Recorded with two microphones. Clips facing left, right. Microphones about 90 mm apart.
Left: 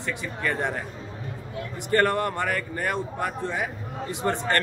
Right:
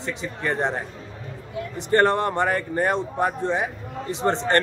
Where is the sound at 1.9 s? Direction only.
25° right (ahead or behind).